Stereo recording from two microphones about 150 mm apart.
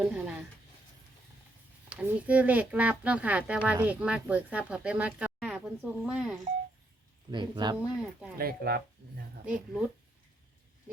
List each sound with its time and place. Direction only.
0.0 s a sound: 5° right (ahead or behind)
1.9 s speech: 10° right (ahead or behind)
7.3 s speech: 30° right (ahead or behind)
7.8 s speech: 5° right (ahead or behind)
8.4 s speech: 90° right
9.5 s speech: 10° right (ahead or behind)